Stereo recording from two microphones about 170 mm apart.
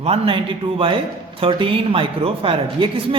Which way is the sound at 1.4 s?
30° right (ahead or behind).